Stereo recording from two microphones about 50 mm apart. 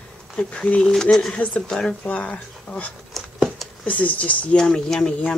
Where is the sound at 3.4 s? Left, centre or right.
Centre.